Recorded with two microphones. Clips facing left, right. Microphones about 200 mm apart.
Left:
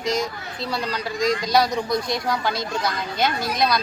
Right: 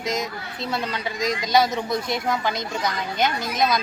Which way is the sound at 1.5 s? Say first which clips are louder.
Right 2 dB; centre (ahead or behind).